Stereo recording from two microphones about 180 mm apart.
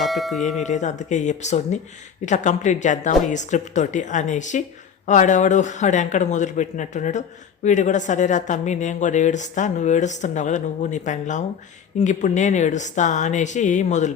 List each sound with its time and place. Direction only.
0.0 s speech: centre (ahead or behind)
0.6 s speech: 40° left (ahead or behind)